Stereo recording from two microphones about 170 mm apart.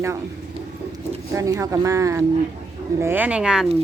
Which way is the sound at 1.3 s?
20° right (ahead or behind).